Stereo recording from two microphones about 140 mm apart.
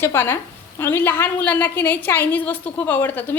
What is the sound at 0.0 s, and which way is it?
A woman's voice, 15° left (ahead or behind).